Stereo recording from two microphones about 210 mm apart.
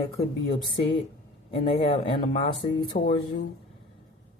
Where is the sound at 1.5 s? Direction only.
25° left (ahead or behind).